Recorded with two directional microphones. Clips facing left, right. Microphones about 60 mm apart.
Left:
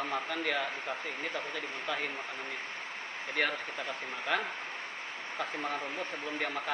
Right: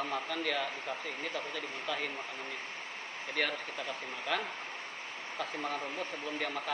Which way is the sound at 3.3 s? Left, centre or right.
Centre.